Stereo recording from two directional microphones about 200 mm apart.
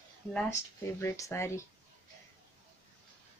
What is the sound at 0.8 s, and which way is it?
Speech, 15° left (ahead or behind).